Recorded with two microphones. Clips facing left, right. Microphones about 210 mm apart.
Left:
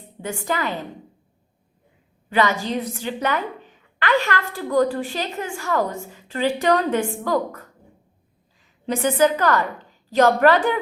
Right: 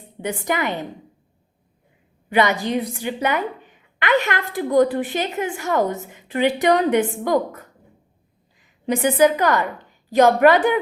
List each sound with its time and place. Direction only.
0.2 s a woman's voice: 20° right (ahead or behind)
2.3 s a woman's voice: 15° right (ahead or behind)
8.9 s a woman's voice: 15° right (ahead or behind)